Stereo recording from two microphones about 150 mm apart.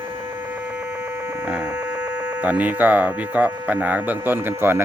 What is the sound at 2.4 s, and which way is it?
Speech, 10° right (ahead or behind).